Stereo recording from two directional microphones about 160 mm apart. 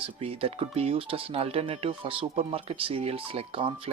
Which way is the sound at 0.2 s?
35° right (ahead or behind).